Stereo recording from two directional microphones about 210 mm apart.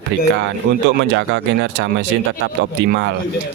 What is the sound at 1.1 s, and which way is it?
Speech, 60° right (ahead or behind).